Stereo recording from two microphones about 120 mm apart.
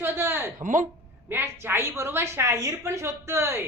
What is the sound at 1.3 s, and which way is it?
A woman's voice, 20° right (ahead or behind).